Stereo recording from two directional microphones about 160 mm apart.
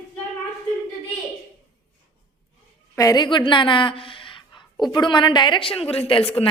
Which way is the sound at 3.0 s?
25° left (ahead or behind).